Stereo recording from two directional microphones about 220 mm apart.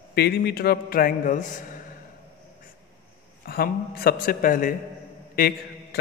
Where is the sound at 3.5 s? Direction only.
45° left (ahead or behind).